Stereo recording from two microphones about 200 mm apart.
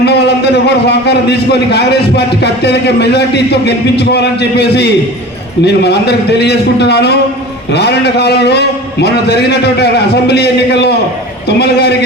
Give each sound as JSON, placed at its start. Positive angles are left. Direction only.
{"t": 0.0, "sound": "a man's voice", "side_deg": 55}